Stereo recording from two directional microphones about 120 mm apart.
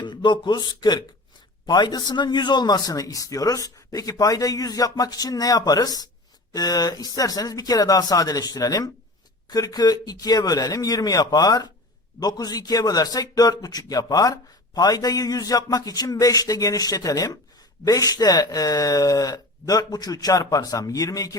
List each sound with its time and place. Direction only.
0.0 s a man's voice: 40° left (ahead or behind)